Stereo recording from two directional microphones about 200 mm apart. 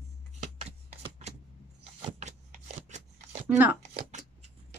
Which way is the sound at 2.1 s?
35° right (ahead or behind).